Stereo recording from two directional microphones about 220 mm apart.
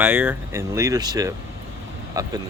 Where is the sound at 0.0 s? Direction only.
5° right (ahead or behind).